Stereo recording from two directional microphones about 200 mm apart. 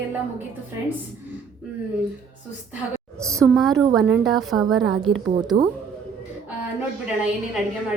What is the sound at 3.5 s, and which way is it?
A woman's voice, centre (ahead or behind).